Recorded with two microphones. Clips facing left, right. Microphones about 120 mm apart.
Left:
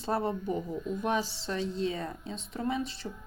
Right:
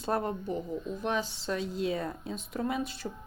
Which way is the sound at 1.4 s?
5° right (ahead or behind).